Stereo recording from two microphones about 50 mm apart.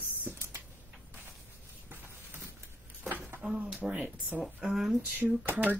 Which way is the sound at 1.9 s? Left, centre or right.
Right.